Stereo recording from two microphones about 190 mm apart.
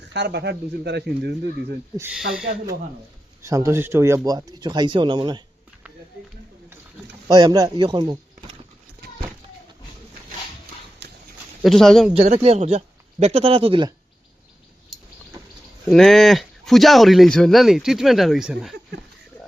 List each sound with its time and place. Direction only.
0.0 s speech: 65° right (ahead or behind)
2.0 s speech: 5° right (ahead or behind)
3.4 s speech: 15° right (ahead or behind)
7.3 s speech: 20° right (ahead or behind)
11.0 s dog: 65° right (ahead or behind)
11.6 s speech: centre (ahead or behind)
12.2 s a man's voice: 35° right (ahead or behind)
15.9 s speech: centre (ahead or behind)